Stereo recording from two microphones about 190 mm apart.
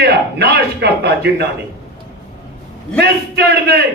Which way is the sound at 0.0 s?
60° right (ahead or behind).